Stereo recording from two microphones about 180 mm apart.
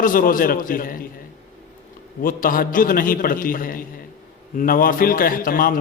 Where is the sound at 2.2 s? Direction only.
50° left (ahead or behind).